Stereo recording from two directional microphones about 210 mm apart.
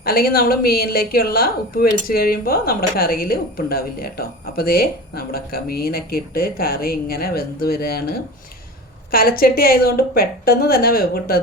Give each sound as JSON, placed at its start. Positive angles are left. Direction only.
{"t": 0.0, "sound": "a woman's voice", "side_deg": 45}
{"t": 9.1, "sound": "a woman's voice", "side_deg": 45}